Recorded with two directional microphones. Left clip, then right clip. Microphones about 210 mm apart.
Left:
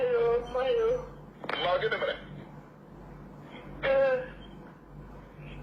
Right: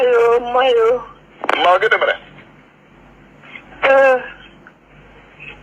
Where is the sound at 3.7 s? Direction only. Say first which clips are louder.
Right 14 dB; 30° right (ahead or behind).